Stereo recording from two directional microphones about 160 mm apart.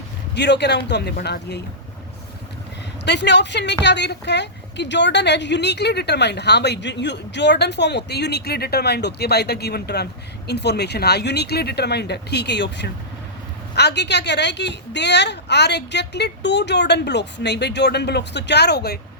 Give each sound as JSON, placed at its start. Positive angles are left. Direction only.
{"t": 0.3, "sound": "a woman's voice", "side_deg": 90}
{"t": 3.1, "sound": "a woman's voice", "side_deg": 90}